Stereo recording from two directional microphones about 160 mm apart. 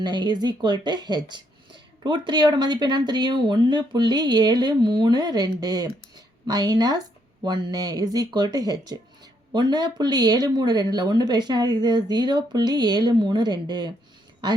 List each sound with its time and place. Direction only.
0.0 s speech: 25° right (ahead or behind)